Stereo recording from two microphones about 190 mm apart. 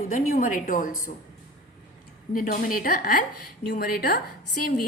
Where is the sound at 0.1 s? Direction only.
45° left (ahead or behind).